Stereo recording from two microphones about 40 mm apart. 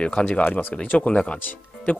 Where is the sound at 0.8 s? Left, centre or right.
Left.